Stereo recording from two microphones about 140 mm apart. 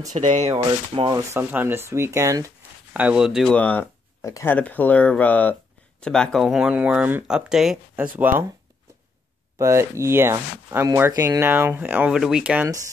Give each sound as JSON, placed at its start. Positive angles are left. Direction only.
{"t": 0.2, "sound": "speech", "side_deg": -50}
{"t": 1.1, "sound": "speech", "side_deg": -15}
{"t": 2.9, "sound": "speech", "side_deg": -10}
{"t": 3.5, "sound": "speech", "side_deg": 10}
{"t": 4.2, "sound": "speech", "side_deg": 20}
{"t": 4.6, "sound": "speech", "side_deg": 10}
{"t": 9.6, "sound": "speech", "side_deg": -20}